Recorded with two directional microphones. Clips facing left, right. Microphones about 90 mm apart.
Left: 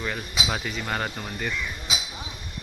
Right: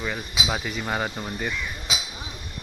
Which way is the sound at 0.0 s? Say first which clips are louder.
Right 1 dB; 5° right (ahead or behind).